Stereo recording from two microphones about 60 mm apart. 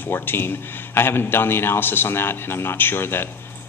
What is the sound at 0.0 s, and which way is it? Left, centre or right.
Speech, left.